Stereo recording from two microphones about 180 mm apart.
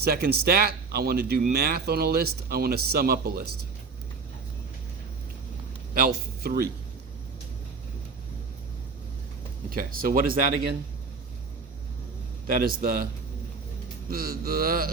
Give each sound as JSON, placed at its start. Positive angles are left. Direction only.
{"t": 0.0, "sound": "speech", "side_deg": -60}
{"t": 5.9, "sound": "speech", "side_deg": -55}
{"t": 9.6, "sound": "speech", "side_deg": -55}
{"t": 12.5, "sound": "speech", "side_deg": -55}
{"t": 14.1, "sound": "speech", "side_deg": -55}